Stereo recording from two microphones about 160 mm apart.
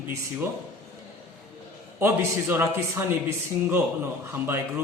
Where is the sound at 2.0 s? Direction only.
15° right (ahead or behind).